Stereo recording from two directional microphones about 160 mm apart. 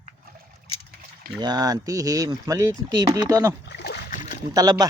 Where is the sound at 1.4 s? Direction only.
25° right (ahead or behind).